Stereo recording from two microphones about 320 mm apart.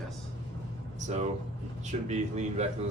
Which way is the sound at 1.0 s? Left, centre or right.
Right.